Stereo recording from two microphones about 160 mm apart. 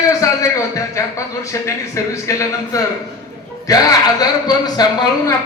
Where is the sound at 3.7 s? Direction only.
20° left (ahead or behind).